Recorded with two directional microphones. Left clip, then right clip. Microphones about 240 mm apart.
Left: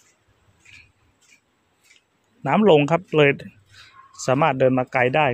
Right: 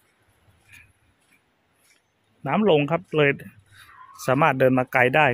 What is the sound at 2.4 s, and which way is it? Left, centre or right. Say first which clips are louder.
Speech: left 4 dB; centre.